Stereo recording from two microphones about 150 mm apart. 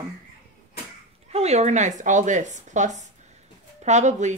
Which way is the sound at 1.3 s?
45° right (ahead or behind).